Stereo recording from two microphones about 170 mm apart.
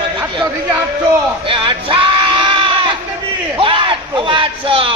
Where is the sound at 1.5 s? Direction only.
30° right (ahead or behind).